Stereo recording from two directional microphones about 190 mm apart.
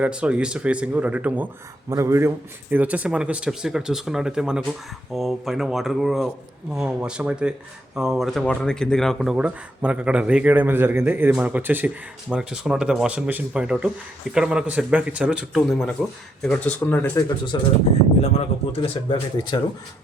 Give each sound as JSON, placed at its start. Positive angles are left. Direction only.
{"t": 0.0, "sound": "speech", "side_deg": -5}
{"t": 17.2, "sound": "speech", "side_deg": 20}
{"t": 18.2, "sound": "speech", "side_deg": 35}